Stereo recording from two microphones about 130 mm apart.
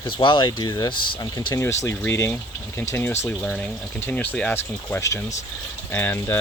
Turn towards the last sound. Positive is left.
turn(degrees=15)  # may be behind; listen again after turning